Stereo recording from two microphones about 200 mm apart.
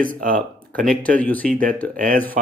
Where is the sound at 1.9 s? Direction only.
45° right (ahead or behind).